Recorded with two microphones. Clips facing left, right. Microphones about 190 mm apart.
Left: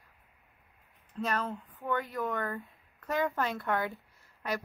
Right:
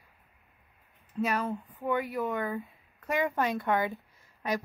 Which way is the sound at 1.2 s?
10° right (ahead or behind).